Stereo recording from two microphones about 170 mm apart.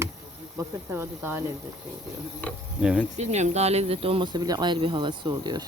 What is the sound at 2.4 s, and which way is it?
Speech, 10° left (ahead or behind).